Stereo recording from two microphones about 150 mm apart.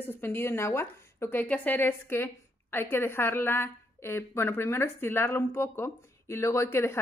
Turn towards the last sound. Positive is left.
turn(degrees=20)  # may be behind; listen again after turning